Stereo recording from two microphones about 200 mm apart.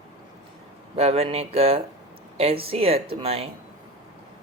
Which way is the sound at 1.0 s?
30° right (ahead or behind).